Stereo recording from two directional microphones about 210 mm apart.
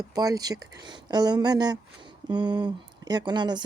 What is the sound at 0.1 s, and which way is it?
Speech, 15° right (ahead or behind).